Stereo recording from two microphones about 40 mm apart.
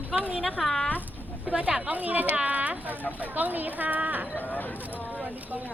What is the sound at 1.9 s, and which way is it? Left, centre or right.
Speech, right.